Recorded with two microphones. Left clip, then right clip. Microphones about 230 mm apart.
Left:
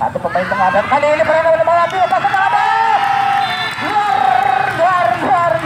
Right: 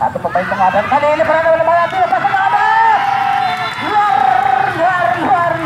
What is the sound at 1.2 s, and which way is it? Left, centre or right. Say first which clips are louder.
Run: even; left.